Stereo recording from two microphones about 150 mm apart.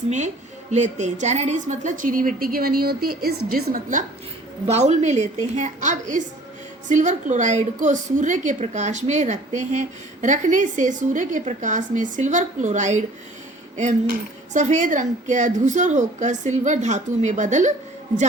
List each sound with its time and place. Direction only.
0.7 s a woman's voice: 50° right (ahead or behind)
4.6 s a woman's voice: 45° right (ahead or behind)
14.1 s speech: 55° right (ahead or behind)